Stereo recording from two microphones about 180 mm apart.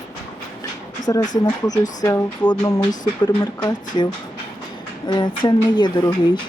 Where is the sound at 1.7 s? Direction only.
20° left (ahead or behind).